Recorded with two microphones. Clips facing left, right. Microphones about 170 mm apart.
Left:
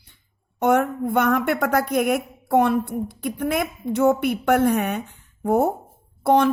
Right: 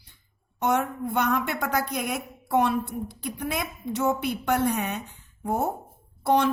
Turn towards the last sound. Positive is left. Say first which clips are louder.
# left 5 dB
turn(degrees=50)  # may be behind; listen again after turning